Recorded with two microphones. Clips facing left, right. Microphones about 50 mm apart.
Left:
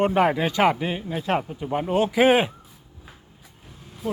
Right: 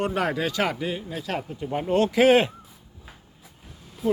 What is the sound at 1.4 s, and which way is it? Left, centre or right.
Speech, centre.